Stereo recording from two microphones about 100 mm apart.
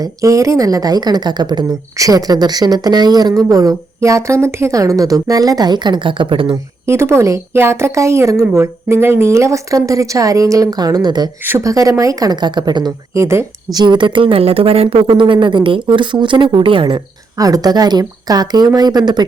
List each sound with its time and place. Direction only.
0.0 s a woman's voice: 35° right (ahead or behind); by 6.6 s 55° right (ahead or behind)
6.8 s a woman's voice: 25° right (ahead or behind); by 12.9 s 45° right (ahead or behind)
13.1 s speech: 30° right (ahead or behind)
13.7 s a woman's voice: 50° right (ahead or behind)
17.3 s a woman's voice: 35° right (ahead or behind)